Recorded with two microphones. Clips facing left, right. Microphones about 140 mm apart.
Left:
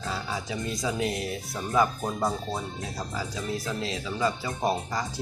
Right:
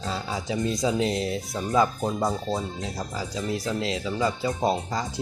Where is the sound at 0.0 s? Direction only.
25° right (ahead or behind).